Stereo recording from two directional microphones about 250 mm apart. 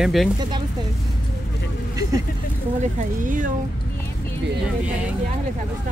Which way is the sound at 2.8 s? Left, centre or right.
Right.